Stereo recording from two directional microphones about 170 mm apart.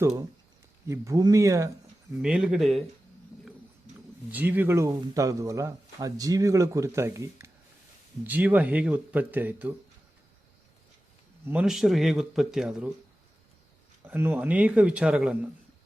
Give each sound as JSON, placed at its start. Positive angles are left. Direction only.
{"t": 0.9, "sound": "speech", "side_deg": -20}
{"t": 2.2, "sound": "speech", "side_deg": -5}
{"t": 4.3, "sound": "speech", "side_deg": -10}
{"t": 11.4, "sound": "speech", "side_deg": -5}
{"t": 14.0, "sound": "speech", "side_deg": -15}